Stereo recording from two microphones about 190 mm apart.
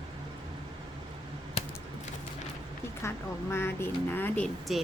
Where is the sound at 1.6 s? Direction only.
30° left (ahead or behind).